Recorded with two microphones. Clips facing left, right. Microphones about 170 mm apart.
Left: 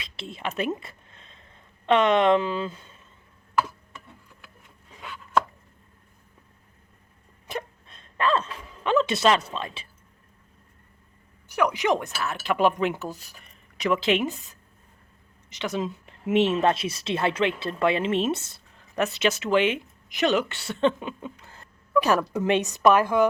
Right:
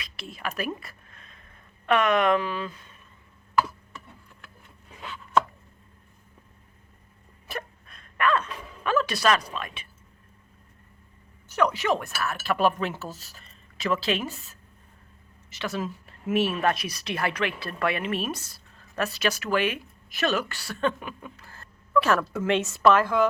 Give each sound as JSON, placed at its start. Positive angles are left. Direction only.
{"t": 0.0, "sound": "a sound", "side_deg": 25}
{"t": 7.4, "sound": "gasp", "side_deg": 20}
{"t": 11.4, "sound": "speech", "side_deg": 10}